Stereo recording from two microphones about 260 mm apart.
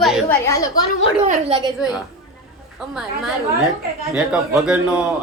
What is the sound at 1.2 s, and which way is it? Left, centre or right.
Speech, right.